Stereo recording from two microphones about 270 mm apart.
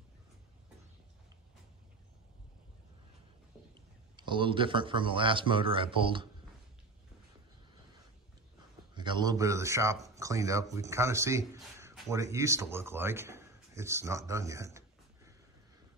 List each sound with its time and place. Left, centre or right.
4.2 s speech: centre
8.9 s a man's voice: centre